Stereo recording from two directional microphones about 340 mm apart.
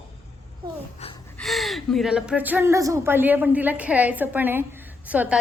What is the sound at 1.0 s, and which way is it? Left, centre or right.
Gasp, centre.